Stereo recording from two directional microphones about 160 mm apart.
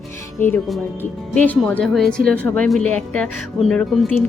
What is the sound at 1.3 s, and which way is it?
Speech, 10° left (ahead or behind).